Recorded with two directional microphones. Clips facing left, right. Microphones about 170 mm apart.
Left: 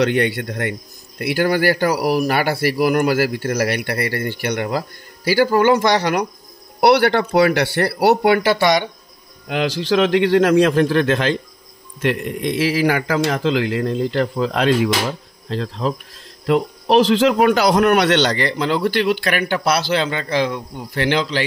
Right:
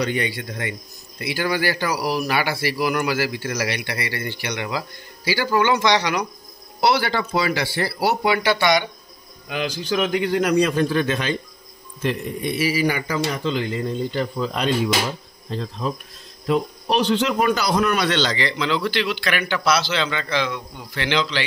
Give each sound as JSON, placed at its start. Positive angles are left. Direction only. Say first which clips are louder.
{"t": 0.0, "sound": "a man's voice", "louder": "left 6 dB", "side_deg": 65}
{"t": 6.8, "sound": "speech", "louder": "left 6 dB", "side_deg": 60}
{"t": 8.5, "sound": "speech", "louder": "left 3 dB", "side_deg": 40}
{"t": 9.5, "sound": "a man's voice", "louder": "left 6 dB", "side_deg": 80}
{"t": 12.0, "sound": "a man's voice", "louder": "left 4 dB", "side_deg": 75}